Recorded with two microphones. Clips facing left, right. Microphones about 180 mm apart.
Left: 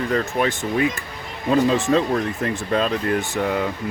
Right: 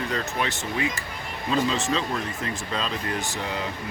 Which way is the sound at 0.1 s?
50° left (ahead or behind).